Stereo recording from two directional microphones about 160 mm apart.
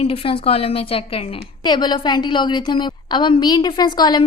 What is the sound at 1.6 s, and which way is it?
A woman's voice, 25° left (ahead or behind).